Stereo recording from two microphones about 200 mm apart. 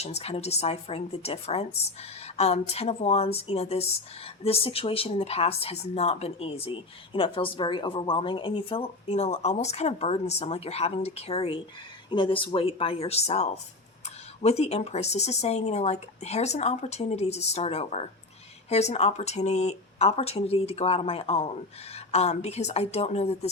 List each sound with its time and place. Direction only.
0.0 s speech: 30° left (ahead or behind)